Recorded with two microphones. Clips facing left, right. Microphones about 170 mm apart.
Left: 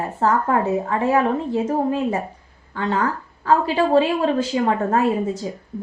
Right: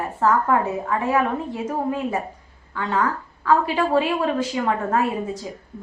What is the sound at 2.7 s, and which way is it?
Speech, 35° left (ahead or behind).